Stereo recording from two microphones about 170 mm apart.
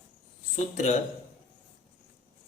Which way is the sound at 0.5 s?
45° left (ahead or behind).